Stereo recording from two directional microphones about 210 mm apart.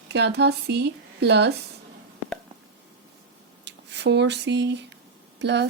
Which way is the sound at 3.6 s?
55° right (ahead or behind).